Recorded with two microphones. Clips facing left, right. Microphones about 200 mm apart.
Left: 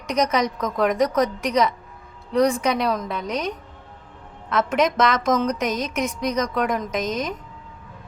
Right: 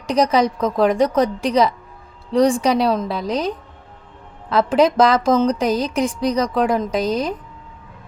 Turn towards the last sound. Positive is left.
turn(degrees=-30)  # may be behind; listen again after turning